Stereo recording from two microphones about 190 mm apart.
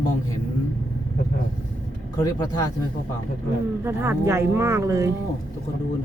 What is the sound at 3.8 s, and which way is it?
Speech, 10° right (ahead or behind).